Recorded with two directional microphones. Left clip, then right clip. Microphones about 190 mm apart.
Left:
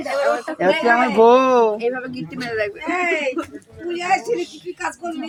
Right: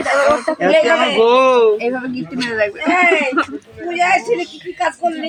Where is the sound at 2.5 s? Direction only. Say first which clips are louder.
Right 5 dB; 45° right (ahead or behind).